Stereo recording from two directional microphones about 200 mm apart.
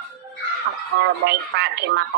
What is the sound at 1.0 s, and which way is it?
Speech, 55° right (ahead or behind).